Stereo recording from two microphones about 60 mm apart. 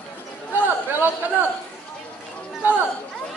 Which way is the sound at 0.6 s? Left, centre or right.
Right.